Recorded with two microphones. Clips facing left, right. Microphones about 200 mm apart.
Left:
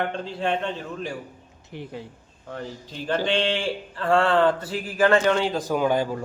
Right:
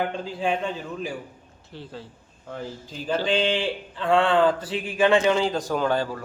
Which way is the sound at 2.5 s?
Centre (ahead or behind).